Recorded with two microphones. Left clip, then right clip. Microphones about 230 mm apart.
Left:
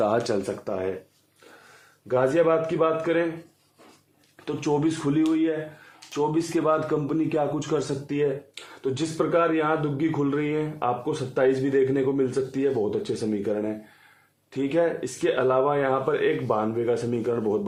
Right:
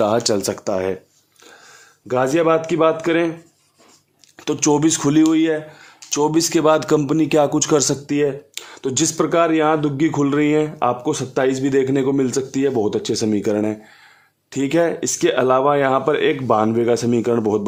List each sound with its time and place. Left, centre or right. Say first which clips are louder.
0.0 s speech: right 6 dB; right
2.0 s a man's voice: right 4 dB; right
4.4 s a man's voice: right 8 dB; right